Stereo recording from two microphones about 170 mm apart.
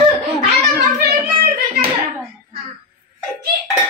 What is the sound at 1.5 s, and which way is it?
Hands, 60° right (ahead or behind).